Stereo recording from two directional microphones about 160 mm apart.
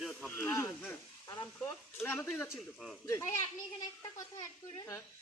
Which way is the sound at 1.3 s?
25° left (ahead or behind).